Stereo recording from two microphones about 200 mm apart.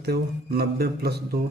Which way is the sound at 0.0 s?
55° right (ahead or behind).